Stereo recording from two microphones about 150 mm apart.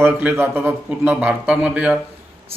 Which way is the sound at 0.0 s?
10° right (ahead or behind).